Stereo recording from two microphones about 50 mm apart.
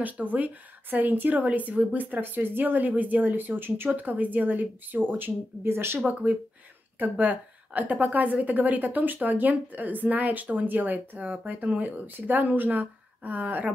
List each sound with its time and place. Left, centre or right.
0.0 s a woman's voice: right
5.6 s speech: right
5.9 s a woman's voice: right